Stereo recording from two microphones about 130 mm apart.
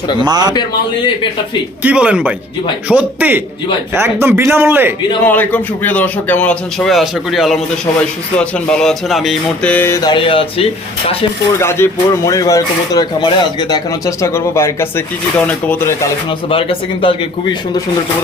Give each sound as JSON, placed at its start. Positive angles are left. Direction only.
{"t": 0.2, "sound": "speech", "side_deg": -30}
{"t": 1.8, "sound": "speech", "side_deg": -10}
{"t": 5.2, "sound": "speech", "side_deg": 10}
{"t": 9.9, "sound": "speech", "side_deg": 30}
{"t": 11.5, "sound": "speech", "side_deg": 20}
{"t": 16.5, "sound": "speech", "side_deg": 45}